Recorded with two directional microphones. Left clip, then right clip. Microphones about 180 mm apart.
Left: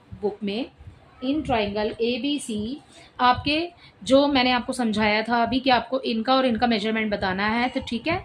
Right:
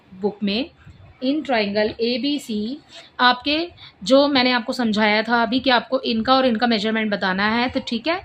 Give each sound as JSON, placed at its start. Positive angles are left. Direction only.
{"t": 0.2, "sound": "a woman's voice", "side_deg": -35}